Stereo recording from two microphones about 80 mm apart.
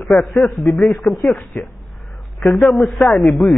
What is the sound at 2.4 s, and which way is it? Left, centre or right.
Speech, centre.